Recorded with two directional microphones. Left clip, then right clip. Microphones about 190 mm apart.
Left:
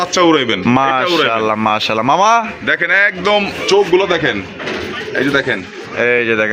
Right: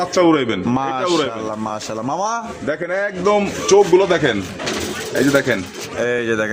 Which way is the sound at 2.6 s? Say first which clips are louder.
Left 6 dB; 10° right (ahead or behind).